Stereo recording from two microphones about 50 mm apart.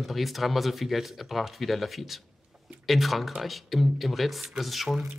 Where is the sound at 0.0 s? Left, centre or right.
Centre.